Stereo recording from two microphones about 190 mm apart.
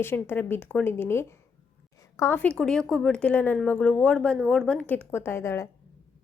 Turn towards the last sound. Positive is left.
turn(degrees=15)  # may be behind; listen again after turning